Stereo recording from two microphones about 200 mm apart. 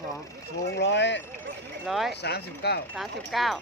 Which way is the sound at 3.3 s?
Centre (ahead or behind).